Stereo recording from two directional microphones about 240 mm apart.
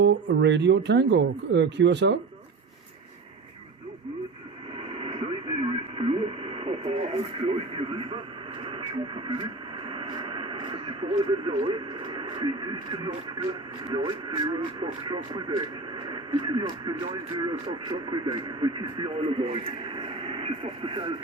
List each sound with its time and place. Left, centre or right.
0.0 s speech: right
4.9 s radio: right
8.6 s speech: right